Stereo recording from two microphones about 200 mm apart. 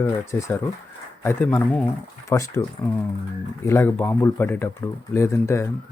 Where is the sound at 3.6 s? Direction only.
10° left (ahead or behind).